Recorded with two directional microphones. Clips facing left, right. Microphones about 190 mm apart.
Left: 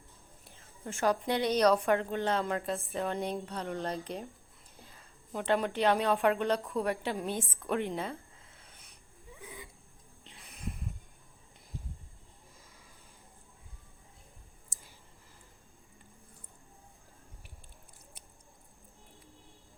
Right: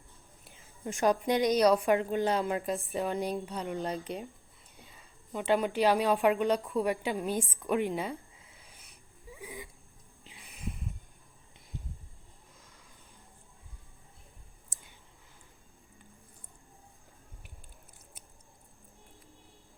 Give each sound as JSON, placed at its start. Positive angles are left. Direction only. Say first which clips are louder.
{"t": 0.9, "sound": "speech", "louder": "right 3 dB", "side_deg": -15}
{"t": 3.1, "sound": "a woman's voice", "louder": "right 2 dB", "side_deg": 0}
{"t": 9.4, "sound": "a sound", "louder": "right 4 dB", "side_deg": -15}
{"t": 10.2, "sound": "snort", "louder": "right 1 dB", "side_deg": 0}
{"t": 14.7, "sound": "clicking", "louder": "left 1 dB", "side_deg": 0}